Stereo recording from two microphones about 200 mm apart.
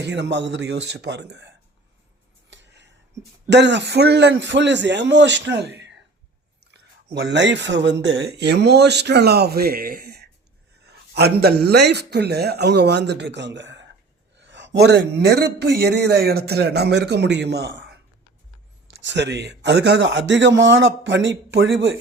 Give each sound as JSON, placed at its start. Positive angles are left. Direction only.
{"t": 0.0, "sound": "a man's voice", "side_deg": -60}
{"t": 2.5, "sound": "a sound", "side_deg": -60}
{"t": 3.5, "sound": "a man's voice", "side_deg": -60}
{"t": 18.9, "sound": "a man's voice", "side_deg": -60}